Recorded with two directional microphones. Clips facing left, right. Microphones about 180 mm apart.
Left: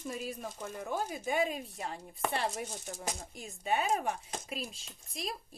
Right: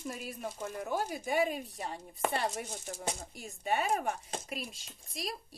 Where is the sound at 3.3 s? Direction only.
Centre (ahead or behind).